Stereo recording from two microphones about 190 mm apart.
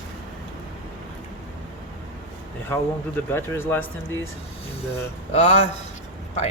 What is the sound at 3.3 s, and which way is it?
Speech, 10° left (ahead or behind).